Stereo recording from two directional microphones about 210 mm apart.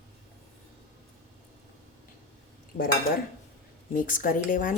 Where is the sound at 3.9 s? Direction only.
40° left (ahead or behind).